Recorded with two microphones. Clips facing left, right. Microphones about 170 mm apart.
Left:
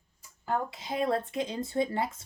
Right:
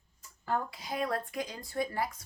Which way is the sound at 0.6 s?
25° left (ahead or behind).